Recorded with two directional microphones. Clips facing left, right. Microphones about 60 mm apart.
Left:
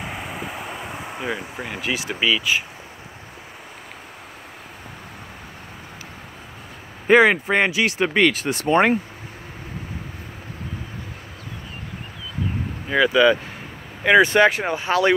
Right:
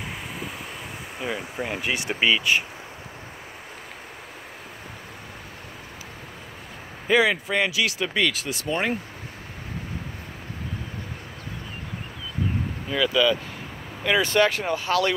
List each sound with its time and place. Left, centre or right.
1.2 s speech: centre
7.1 s speech: left
12.9 s speech: left